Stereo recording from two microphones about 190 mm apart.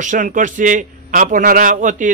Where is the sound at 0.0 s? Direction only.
45° right (ahead or behind).